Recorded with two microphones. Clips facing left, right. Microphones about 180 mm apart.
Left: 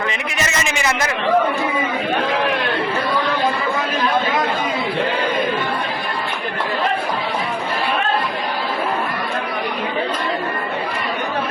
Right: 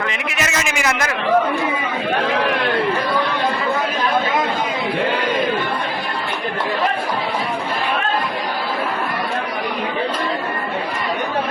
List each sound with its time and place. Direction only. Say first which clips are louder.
0.3 s a man's voice: even; 5° right (ahead or behind)